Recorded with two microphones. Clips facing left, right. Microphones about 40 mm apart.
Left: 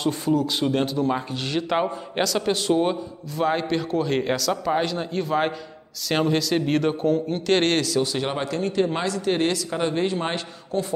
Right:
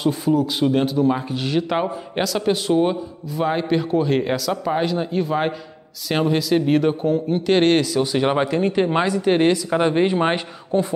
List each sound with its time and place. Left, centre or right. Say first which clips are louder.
0.0 s speech: right 3 dB; centre
9.7 s speech: right 6 dB; right